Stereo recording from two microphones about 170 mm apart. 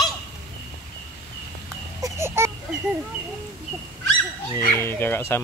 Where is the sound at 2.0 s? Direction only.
15° right (ahead or behind).